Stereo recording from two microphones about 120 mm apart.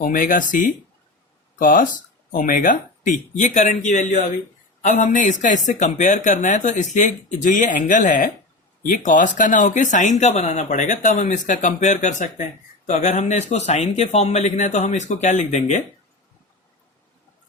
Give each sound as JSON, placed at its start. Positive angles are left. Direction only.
{"t": 0.0, "sound": "speech", "side_deg": 90}
{"t": 2.4, "sound": "speech", "side_deg": 90}